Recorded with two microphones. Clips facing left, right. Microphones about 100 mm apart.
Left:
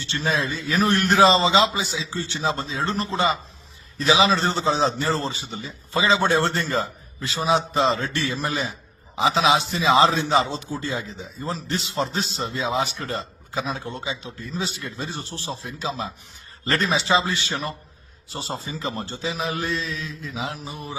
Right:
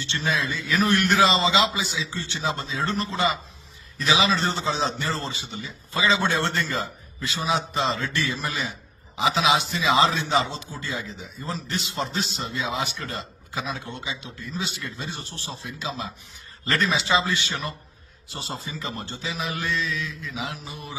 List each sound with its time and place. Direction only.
0.0 s a man's voice: 35° left (ahead or behind)